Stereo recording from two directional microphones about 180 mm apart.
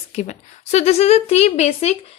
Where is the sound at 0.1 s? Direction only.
40° left (ahead or behind).